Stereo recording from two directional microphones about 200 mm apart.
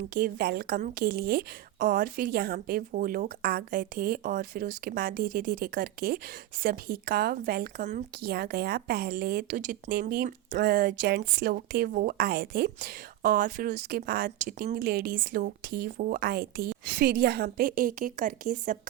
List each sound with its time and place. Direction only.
0.1 s a woman's voice: 50° right (ahead or behind)